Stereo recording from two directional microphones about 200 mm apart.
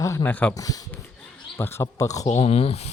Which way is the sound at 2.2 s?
35° left (ahead or behind).